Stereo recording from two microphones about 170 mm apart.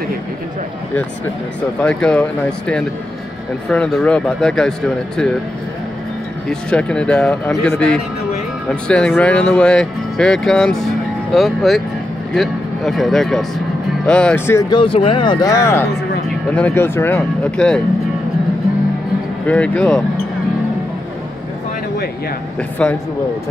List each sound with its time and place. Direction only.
1.8 s speech: 5° left (ahead or behind)
6.7 s speech: 5° left (ahead or behind)
14.8 s speech: 30° left (ahead or behind); by 17.8 s 5° left (ahead or behind)
19.4 s speech: 10° left (ahead or behind)
22.6 s speech: 10° left (ahead or behind)